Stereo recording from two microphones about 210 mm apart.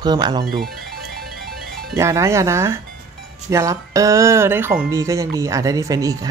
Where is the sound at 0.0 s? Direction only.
20° right (ahead or behind).